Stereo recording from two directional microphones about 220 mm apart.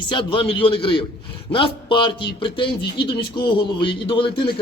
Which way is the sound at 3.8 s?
25° left (ahead or behind).